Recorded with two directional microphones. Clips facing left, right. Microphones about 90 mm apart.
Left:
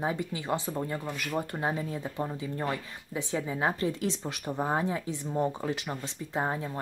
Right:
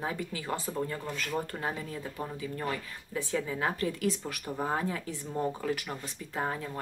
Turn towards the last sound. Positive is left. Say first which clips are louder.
# left 3 dB
turn(degrees=25)  # may be behind; listen again after turning